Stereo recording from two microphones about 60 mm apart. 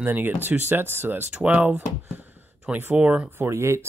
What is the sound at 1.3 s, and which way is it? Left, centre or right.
Speech, centre.